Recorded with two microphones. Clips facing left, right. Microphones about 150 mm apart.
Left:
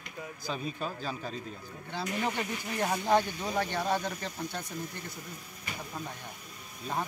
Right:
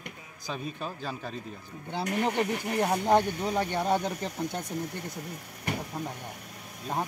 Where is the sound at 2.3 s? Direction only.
65° right (ahead or behind).